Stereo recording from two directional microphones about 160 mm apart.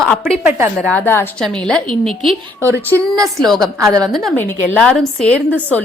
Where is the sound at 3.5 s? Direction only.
Centre (ahead or behind).